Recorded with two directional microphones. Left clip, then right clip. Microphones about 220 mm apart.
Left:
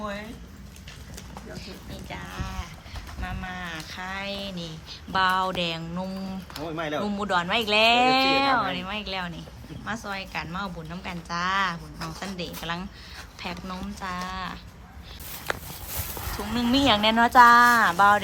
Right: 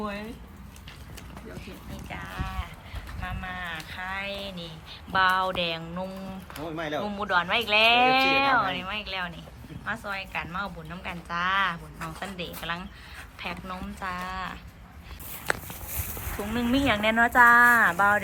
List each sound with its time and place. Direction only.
0.0 s a sound: 35° left (ahead or behind)
2.0 s sheep: 5° left (ahead or behind)
3.2 s speech: 10° left (ahead or behind)
15.5 s walk: 45° left (ahead or behind)
16.5 s speech: 10° left (ahead or behind)